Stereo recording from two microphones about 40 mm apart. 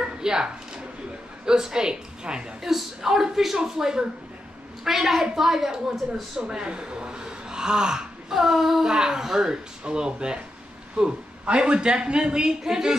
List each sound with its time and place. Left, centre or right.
0.0 s a sound: centre
1.4 s a woman's voice: centre
9.8 s a woman's voice: right